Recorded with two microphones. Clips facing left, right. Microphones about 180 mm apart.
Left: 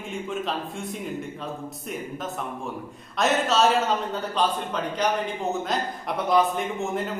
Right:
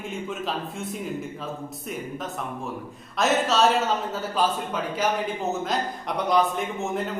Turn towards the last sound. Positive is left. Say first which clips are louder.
# even
turn(degrees=0)  # may be behind; listen again after turning